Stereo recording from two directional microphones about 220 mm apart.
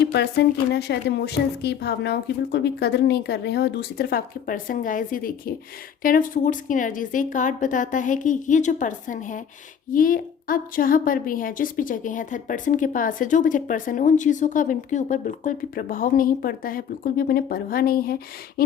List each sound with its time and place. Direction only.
0.0 s a woman's voice: 50° left (ahead or behind)